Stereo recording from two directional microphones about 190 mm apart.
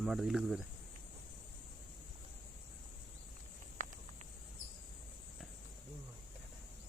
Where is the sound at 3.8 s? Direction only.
45° right (ahead or behind).